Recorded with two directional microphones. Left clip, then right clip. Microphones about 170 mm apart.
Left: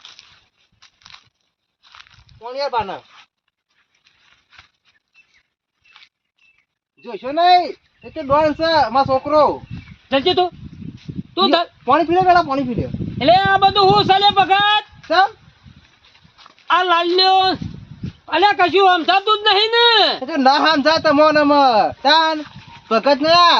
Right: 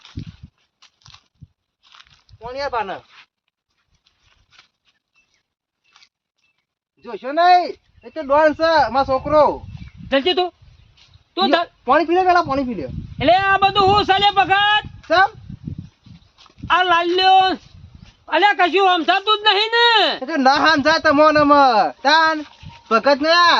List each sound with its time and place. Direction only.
0.2 s a sound: 10° left (ahead or behind)
1.8 s a sound: 20° left (ahead or behind)
2.4 s speech: centre (ahead or behind)
7.0 s speech: 20° left (ahead or behind)
10.1 s speech: 5° right (ahead or behind)
10.9 s a sound: centre (ahead or behind)
11.9 s a man's voice: 30° left (ahead or behind)
13.1 s speech: 5° right (ahead or behind)
16.6 s a man's voice: 5° right (ahead or behind)
20.2 s speech: 20° left (ahead or behind)